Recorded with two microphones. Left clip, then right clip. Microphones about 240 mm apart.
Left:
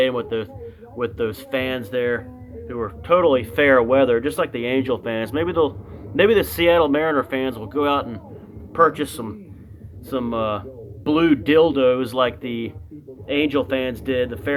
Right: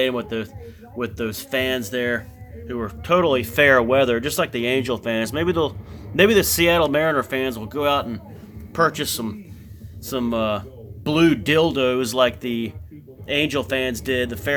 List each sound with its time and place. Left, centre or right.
0.0 s speech: right